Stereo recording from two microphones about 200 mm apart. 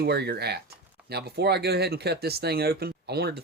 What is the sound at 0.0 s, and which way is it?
Speech, 55° right (ahead or behind).